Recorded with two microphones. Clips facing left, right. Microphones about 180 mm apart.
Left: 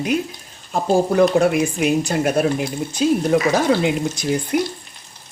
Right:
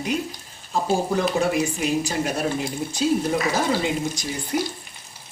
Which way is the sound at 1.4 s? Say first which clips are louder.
Left 5 dB; 65° left (ahead or behind).